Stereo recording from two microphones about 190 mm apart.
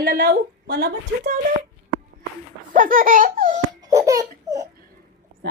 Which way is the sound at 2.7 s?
45° right (ahead or behind).